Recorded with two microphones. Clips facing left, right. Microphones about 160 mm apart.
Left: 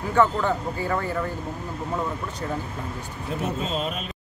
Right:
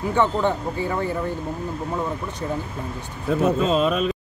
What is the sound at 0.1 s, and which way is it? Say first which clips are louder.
Speech: even; 25° right (ahead or behind).